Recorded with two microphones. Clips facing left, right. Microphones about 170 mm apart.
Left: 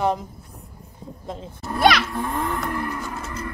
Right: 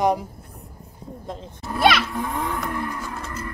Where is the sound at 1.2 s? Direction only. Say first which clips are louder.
Left 2 dB; centre (ahead or behind).